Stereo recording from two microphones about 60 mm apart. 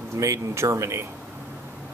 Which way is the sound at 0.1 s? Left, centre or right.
Right.